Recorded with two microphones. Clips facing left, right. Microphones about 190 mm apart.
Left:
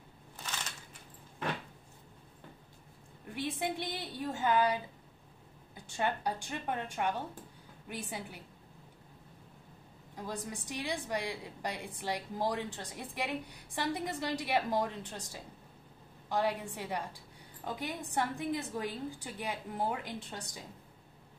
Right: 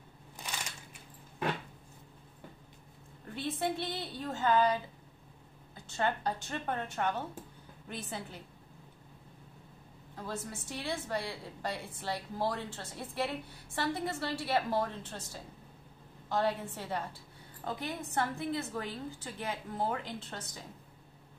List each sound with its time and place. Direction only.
3.3 s a woman's voice: 15° left (ahead or behind)
5.9 s a woman's voice: 15° left (ahead or behind)
10.1 s a woman's voice: 15° left (ahead or behind)